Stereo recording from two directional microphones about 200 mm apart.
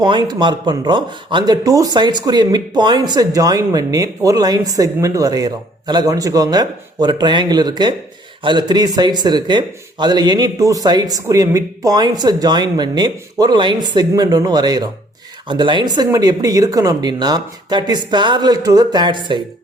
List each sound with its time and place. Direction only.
0.0 s speech: 20° right (ahead or behind)